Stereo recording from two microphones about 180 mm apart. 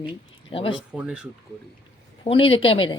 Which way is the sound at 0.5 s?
30° left (ahead or behind).